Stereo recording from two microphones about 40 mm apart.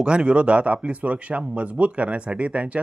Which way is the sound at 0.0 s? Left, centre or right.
Right.